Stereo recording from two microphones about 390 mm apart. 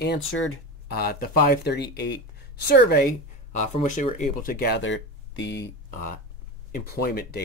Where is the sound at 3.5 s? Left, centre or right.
Centre.